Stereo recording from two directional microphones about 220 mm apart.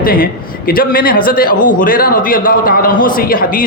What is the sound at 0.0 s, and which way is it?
A woman's voice, 40° left (ahead or behind).